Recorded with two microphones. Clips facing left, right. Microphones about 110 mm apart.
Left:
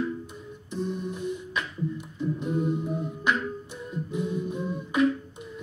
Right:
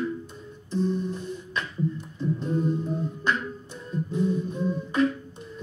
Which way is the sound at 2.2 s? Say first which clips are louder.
Right 1 dB; 15° left (ahead or behind).